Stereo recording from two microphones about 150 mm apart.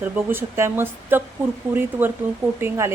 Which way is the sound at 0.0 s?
15° right (ahead or behind).